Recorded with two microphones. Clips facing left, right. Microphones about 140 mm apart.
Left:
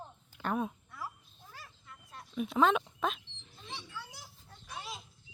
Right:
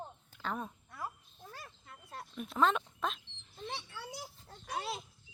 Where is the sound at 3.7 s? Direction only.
55° right (ahead or behind).